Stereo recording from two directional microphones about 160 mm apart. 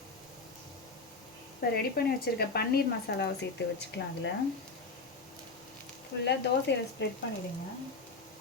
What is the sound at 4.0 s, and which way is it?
Speech, 90° left.